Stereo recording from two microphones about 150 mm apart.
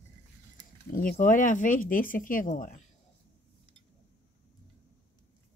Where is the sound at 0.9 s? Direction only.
65° left (ahead or behind).